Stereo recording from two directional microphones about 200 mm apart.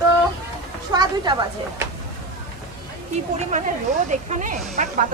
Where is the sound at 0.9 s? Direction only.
20° right (ahead or behind).